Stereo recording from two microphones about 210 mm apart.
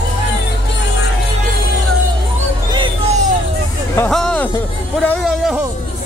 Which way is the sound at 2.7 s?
25° right (ahead or behind).